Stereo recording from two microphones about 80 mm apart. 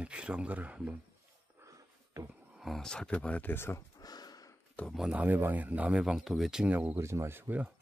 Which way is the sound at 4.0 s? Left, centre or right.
Left.